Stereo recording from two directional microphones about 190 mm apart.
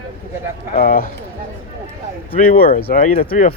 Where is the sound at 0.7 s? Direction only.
50° left (ahead or behind).